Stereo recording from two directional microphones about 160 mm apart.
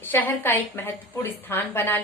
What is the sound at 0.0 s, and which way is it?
A woman's voice, 15° left (ahead or behind).